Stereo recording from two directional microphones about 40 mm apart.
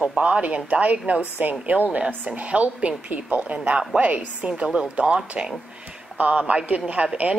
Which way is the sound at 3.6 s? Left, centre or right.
Right.